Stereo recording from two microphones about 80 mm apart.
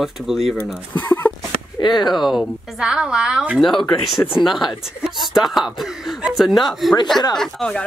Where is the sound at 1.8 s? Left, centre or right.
Left.